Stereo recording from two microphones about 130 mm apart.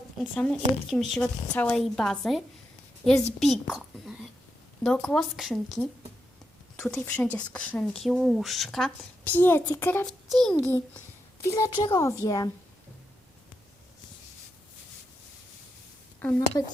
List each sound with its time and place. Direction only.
0.2 s a child's voice: 5° left (ahead or behind)
9.2 s a child's voice: 15° left (ahead or behind)
10.1 s a child's voice: centre (ahead or behind)
11.4 s a woman's voice: 25° left (ahead or behind)